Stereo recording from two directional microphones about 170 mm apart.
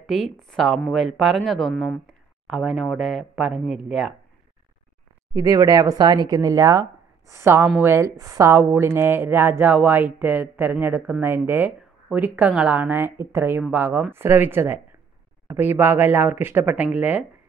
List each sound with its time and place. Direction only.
0.0 s speech: centre (ahead or behind)
5.3 s a woman's voice: 20° right (ahead or behind)